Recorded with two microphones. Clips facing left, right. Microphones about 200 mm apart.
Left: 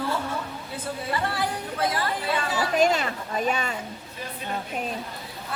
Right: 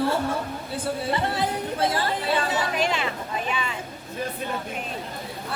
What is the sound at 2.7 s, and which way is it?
Speech, 40° left (ahead or behind).